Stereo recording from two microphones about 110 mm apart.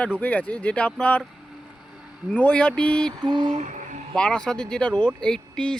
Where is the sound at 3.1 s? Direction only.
40° right (ahead or behind).